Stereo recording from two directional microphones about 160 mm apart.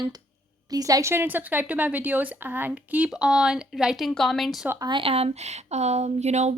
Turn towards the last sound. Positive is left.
turn(degrees=-45)  # may be behind; listen again after turning